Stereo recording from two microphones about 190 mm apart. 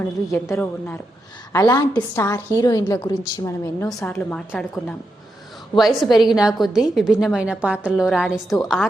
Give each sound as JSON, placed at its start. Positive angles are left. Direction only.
{"t": 0.3, "sound": "a woman's voice", "side_deg": 15}